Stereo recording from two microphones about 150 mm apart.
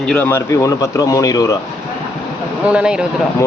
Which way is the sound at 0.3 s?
20° left (ahead or behind).